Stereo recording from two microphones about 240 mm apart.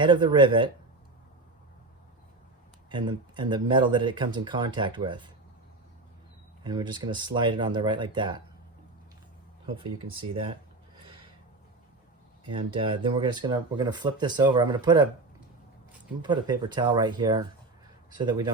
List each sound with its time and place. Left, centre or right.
0.0 s speech: centre
2.9 s speech: centre
6.7 s speech: centre
9.6 s speech: right
12.5 s speech: right
16.2 s speech: centre